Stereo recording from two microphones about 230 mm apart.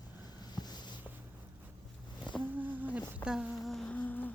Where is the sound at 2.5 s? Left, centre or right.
Centre.